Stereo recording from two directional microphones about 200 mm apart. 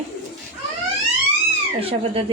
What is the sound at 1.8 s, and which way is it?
Speech, 30° right (ahead or behind).